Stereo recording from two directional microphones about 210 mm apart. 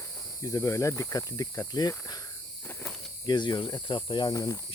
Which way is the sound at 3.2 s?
20° left (ahead or behind).